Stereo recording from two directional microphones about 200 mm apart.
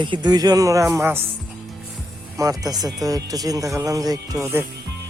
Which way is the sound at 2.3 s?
15° right (ahead or behind).